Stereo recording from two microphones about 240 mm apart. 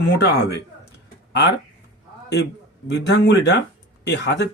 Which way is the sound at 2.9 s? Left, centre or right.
Left.